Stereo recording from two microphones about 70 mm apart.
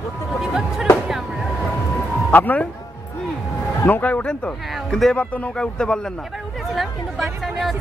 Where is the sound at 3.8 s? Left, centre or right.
Left.